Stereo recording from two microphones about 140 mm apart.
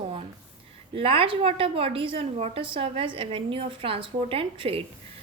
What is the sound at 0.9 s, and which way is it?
A woman's voice, 40° right (ahead or behind).